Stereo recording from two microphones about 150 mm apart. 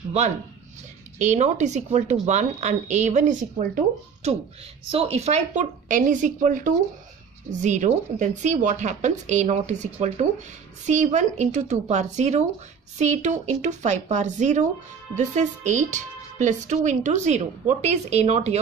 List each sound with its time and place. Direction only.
1.1 s speech: 50° right (ahead or behind)